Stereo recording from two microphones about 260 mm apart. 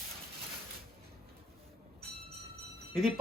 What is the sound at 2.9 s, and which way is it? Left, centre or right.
Speech, centre.